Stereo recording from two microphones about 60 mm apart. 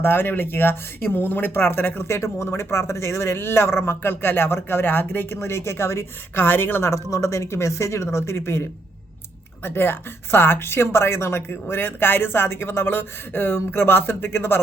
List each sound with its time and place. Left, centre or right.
0.0 s speech: left
6.9 s speech: left
9.6 s speech: left